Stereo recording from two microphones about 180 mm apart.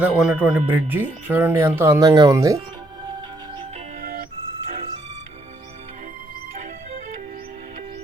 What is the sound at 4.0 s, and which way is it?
Music, 50° right (ahead or behind).